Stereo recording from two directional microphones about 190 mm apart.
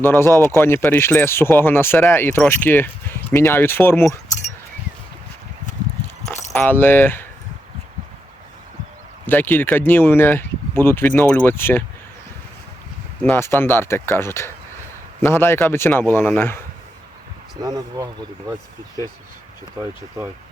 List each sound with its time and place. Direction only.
0.0 s speech: 15° left (ahead or behind)
6.5 s speech: 10° left (ahead or behind)
9.2 s speech: 10° left (ahead or behind)
13.2 s speech: 10° left (ahead or behind)
17.6 s speech: 20° right (ahead or behind)
20.2 s speech: 15° right (ahead or behind)